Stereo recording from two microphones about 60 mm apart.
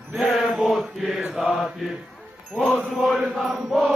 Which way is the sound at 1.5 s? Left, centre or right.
Centre.